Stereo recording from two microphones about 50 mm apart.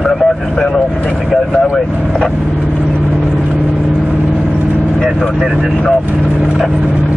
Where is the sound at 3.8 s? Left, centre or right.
Centre.